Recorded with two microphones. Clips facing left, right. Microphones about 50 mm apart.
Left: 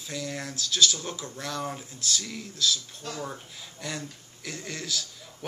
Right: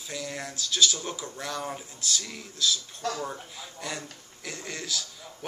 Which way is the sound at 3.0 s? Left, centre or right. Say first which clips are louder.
Right 7 dB; right.